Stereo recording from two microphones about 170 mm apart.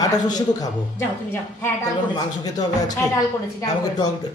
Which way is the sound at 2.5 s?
20° left (ahead or behind).